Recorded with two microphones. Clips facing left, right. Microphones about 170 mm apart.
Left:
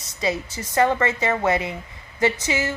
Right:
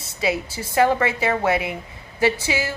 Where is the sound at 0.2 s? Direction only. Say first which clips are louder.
Right 2 dB; 5° right (ahead or behind).